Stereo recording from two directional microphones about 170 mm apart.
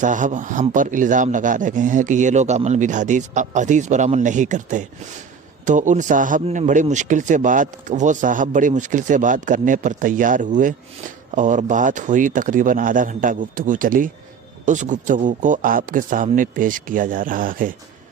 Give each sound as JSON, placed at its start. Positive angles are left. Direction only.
{"t": 0.0, "sound": "speech", "side_deg": -50}